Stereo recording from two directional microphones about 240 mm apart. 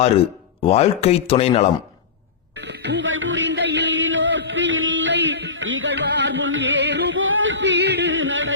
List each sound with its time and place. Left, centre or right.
0.6 s speech: left
2.6 s music: right